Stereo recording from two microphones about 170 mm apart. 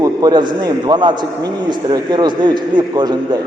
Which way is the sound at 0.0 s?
25° right (ahead or behind).